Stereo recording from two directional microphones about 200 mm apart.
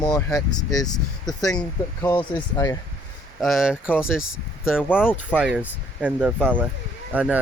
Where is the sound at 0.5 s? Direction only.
20° left (ahead or behind).